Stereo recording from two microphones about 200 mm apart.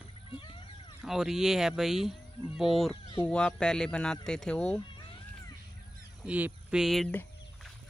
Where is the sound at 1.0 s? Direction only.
Centre (ahead or behind).